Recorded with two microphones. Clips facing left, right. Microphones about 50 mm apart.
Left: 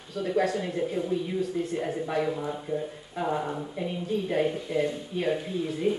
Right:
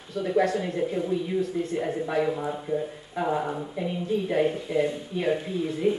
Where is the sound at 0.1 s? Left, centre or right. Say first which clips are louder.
Right 2 dB; centre.